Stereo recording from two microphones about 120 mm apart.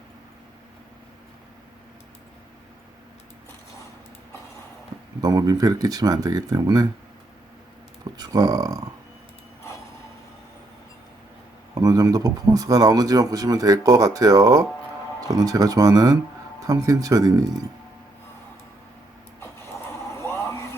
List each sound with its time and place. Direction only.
5.2 s speech: 30° right (ahead or behind)
8.2 s speech: 30° right (ahead or behind)
11.7 s speech: 30° right (ahead or behind)
20.1 s a sound: 25° left (ahead or behind)